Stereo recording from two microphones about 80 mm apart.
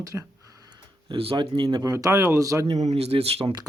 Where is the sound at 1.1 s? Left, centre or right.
Right.